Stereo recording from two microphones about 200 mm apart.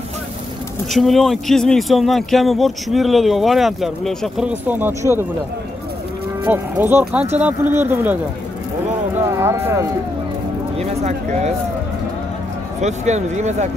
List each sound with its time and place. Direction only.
0.9 s speech: centre (ahead or behind)
6.4 s speech: 10° right (ahead or behind)
9.4 s speech: 15° right (ahead or behind)
10.8 s speech: 30° right (ahead or behind)
12.8 s speech: 35° right (ahead or behind)